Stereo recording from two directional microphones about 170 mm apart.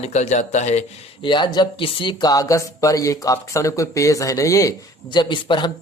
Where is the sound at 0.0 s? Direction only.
40° left (ahead or behind).